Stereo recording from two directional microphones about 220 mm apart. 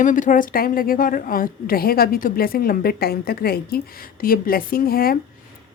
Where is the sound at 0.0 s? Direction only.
35° left (ahead or behind).